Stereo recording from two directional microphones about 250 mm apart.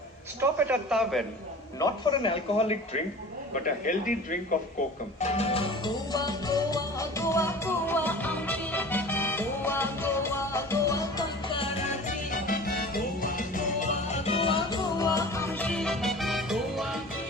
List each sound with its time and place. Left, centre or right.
0.3 s a man's voice: centre
1.8 s speech: centre
5.2 s music: left; by 17.0 s centre